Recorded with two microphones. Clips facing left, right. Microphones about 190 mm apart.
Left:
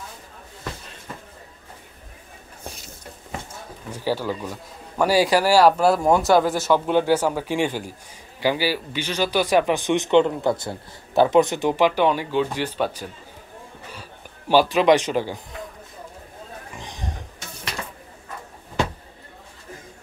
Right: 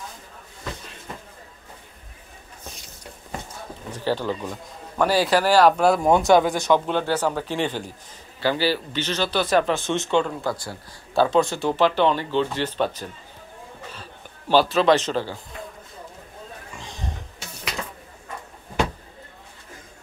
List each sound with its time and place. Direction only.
3.9 s speech: 10° left (ahead or behind)
14.5 s speech: 15° left (ahead or behind)
16.7 s a sound: 20° left (ahead or behind)